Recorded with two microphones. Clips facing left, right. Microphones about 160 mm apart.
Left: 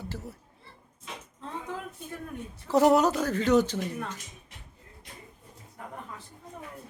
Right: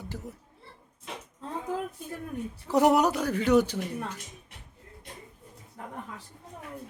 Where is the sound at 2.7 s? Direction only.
15° right (ahead or behind).